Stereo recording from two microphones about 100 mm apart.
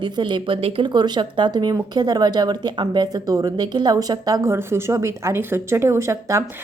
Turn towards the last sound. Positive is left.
turn(degrees=-30)  # may be behind; listen again after turning